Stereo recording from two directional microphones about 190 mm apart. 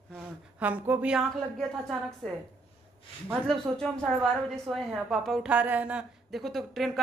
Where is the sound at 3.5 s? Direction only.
Centre (ahead or behind).